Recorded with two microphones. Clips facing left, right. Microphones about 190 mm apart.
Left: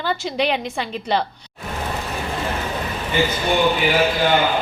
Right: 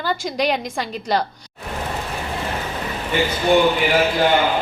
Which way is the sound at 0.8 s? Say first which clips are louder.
Even; centre (ahead or behind).